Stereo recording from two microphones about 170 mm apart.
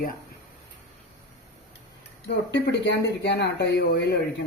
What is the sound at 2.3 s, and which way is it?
Speech, 90° left.